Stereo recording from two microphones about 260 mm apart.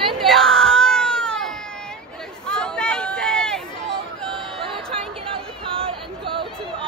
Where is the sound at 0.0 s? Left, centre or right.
Centre.